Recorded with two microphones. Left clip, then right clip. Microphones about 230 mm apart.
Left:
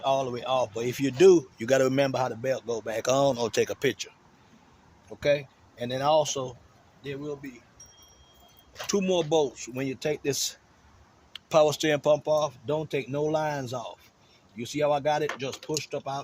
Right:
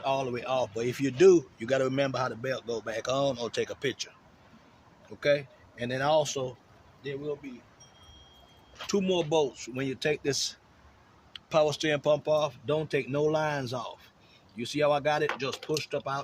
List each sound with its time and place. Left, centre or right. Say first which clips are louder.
0.0 s speech: left 3 dB; centre
5.2 s speech: left 1 dB; left
8.9 s speech: left 2 dB; left; by 16.2 s centre